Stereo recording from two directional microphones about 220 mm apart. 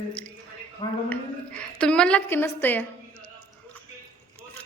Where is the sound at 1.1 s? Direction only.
5° left (ahead or behind).